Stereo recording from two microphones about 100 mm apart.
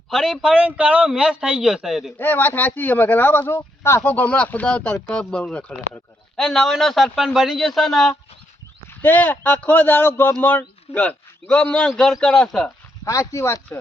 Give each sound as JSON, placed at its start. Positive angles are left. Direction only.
{"t": 0.1, "sound": "a man's voice", "side_deg": -5}
{"t": 2.1, "sound": "speech", "side_deg": 20}
{"t": 4.1, "sound": "a man's voice", "side_deg": 15}
{"t": 9.0, "sound": "a man's voice", "side_deg": 20}
{"t": 13.1, "sound": "speech", "side_deg": 30}